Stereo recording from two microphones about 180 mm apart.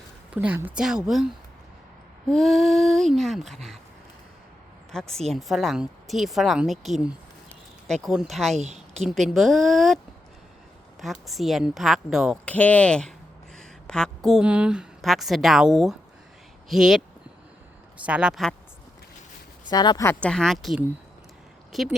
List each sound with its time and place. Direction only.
0.3 s a woman's voice: 10° right (ahead or behind)
2.3 s a woman's voice: centre (ahead or behind)
5.3 s a woman's voice: centre (ahead or behind)
8.5 s a woman's voice: 40° right (ahead or behind)
9.0 s a woman's voice: centre (ahead or behind)
11.0 s a woman's voice: centre (ahead or behind)
18.0 s a woman's voice: 5° right (ahead or behind)
19.7 s speech: 25° left (ahead or behind)
20.1 s a woman's voice: 5° left (ahead or behind)